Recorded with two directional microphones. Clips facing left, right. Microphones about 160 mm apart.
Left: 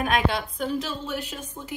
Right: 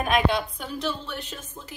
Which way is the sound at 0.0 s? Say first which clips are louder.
Right 1 dB; centre (ahead or behind).